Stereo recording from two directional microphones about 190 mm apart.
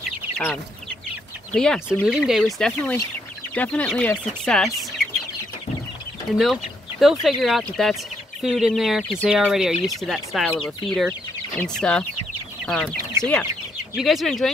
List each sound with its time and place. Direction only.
1.5 s speech: 5° left (ahead or behind)
6.3 s speech: centre (ahead or behind)